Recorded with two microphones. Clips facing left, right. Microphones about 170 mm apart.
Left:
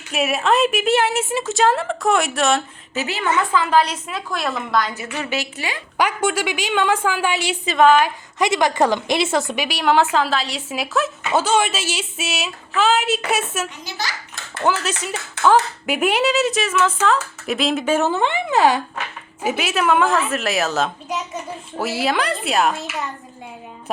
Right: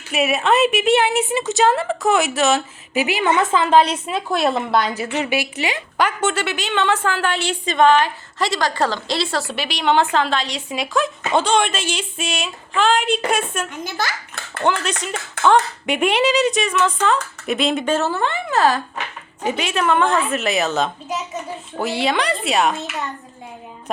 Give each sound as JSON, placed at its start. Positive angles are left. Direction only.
{"t": 0.1, "sound": "speech", "side_deg": 0}
{"t": 2.9, "sound": "a woman's voice", "side_deg": -15}
{"t": 6.0, "sound": "a woman's voice", "side_deg": 10}
{"t": 13.8, "sound": "a child's voice", "side_deg": -55}
{"t": 14.6, "sound": "speech", "side_deg": 5}
{"t": 19.4, "sound": "speech", "side_deg": 5}